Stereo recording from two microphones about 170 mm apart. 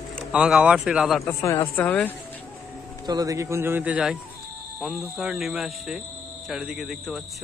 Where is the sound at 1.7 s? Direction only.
10° left (ahead or behind).